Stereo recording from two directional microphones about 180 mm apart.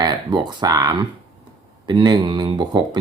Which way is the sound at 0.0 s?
25° right (ahead or behind).